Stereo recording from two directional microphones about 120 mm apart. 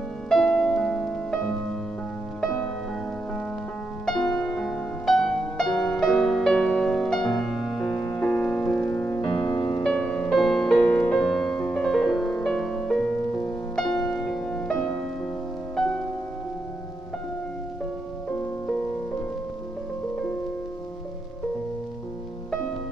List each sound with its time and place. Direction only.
0.3 s music: centre (ahead or behind)
4.0 s music: 5° left (ahead or behind)
9.6 s music: 40° left (ahead or behind)
9.8 s music: 5° left (ahead or behind)